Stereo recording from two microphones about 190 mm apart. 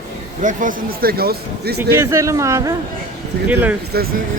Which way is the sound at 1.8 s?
15° right (ahead or behind).